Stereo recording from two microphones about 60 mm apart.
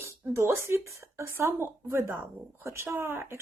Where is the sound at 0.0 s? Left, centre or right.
Right.